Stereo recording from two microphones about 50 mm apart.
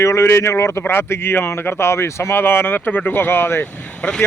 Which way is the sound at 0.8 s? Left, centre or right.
Left.